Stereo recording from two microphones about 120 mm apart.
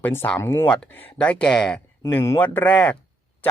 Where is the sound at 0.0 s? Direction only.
20° left (ahead or behind).